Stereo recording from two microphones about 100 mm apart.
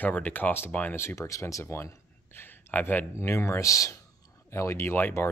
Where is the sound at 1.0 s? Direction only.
30° left (ahead or behind).